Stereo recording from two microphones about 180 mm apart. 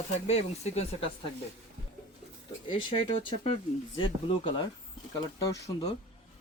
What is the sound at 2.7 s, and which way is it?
Speech, 25° left (ahead or behind).